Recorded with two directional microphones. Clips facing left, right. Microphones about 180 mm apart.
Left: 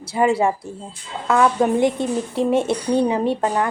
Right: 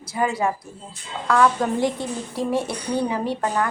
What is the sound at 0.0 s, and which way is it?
A woman's voice, 25° left (ahead or behind).